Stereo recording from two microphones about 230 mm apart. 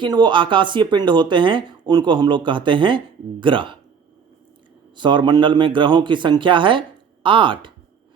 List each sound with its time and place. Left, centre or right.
0.0 s speech: centre
4.9 s speech: right